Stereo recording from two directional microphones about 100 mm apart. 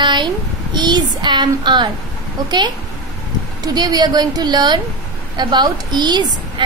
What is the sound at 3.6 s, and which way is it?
A woman's voice, 40° right (ahead or behind).